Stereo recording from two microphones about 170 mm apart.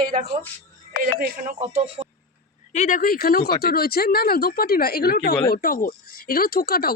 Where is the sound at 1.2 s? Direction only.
45° right (ahead or behind).